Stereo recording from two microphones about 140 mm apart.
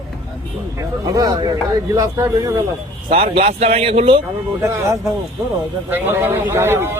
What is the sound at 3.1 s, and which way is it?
A man's voice, 45° right (ahead or behind).